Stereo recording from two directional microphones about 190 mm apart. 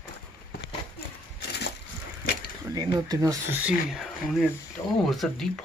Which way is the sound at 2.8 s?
20° right (ahead or behind).